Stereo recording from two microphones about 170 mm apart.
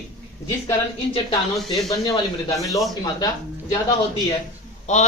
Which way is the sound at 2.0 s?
20° left (ahead or behind).